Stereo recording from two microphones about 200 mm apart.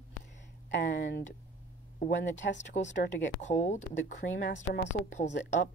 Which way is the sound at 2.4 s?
65° left (ahead or behind).